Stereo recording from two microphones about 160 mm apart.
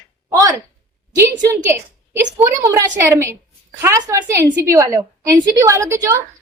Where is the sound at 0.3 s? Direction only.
20° right (ahead or behind).